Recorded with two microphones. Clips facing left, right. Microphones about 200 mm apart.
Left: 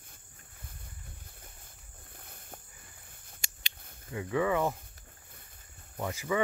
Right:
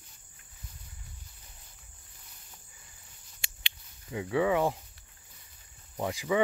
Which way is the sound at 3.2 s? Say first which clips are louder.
Right 3 dB; 50° left (ahead or behind).